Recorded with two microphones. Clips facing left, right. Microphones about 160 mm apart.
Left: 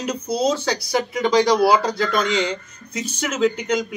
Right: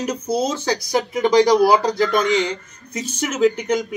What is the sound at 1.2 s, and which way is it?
Speech, 20° right (ahead or behind).